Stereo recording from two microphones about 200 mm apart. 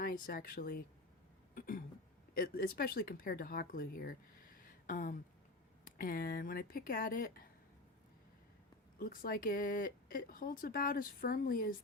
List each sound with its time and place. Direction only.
0.0 s speech: 45° left (ahead or behind)
9.0 s speech: 45° left (ahead or behind)